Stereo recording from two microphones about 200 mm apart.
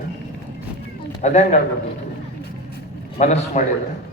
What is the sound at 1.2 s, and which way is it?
Speech, 35° left (ahead or behind).